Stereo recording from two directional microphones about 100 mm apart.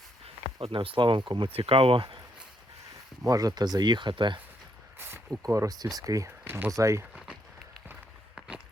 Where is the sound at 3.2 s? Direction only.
40° right (ahead or behind).